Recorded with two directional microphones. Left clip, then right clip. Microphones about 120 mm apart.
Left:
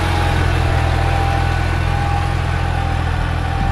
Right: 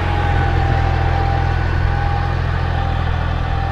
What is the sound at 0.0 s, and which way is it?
Vehicle, 65° left (ahead or behind).